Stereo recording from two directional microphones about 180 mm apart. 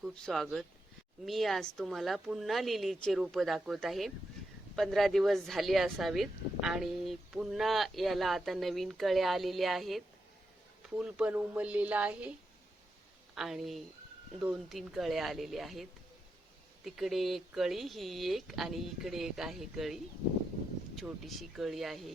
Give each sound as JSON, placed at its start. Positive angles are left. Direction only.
{"t": 0.0, "sound": "a woman's voice", "side_deg": 0}
{"t": 13.3, "sound": "speech", "side_deg": 0}